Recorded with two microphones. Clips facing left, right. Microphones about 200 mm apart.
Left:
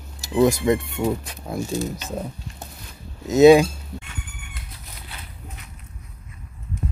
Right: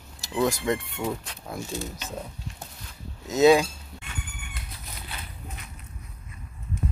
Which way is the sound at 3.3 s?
20° left (ahead or behind).